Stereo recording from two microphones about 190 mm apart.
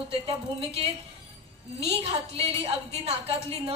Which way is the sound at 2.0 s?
30° right (ahead or behind).